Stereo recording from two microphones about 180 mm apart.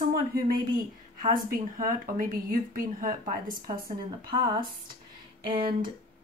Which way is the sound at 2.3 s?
50° right (ahead or behind).